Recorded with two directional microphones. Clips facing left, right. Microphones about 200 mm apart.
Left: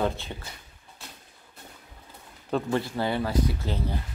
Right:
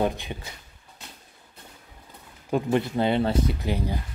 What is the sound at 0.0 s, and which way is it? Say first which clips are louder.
Speech: right 2 dB; 15° right (ahead or behind).